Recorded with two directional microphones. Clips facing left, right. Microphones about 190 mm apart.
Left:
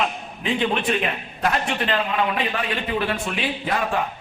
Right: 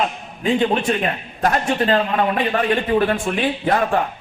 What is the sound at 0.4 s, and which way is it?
A man's voice, 40° right (ahead or behind).